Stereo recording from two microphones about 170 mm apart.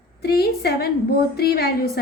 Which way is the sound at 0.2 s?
65° left (ahead or behind).